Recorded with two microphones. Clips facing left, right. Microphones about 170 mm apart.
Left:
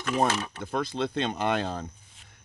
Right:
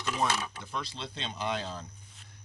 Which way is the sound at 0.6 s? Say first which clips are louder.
Left 10 dB; 50° left (ahead or behind).